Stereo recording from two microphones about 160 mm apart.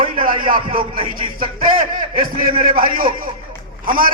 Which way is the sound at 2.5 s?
60° right (ahead or behind).